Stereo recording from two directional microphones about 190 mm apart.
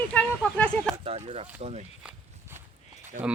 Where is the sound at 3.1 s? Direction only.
45° right (ahead or behind).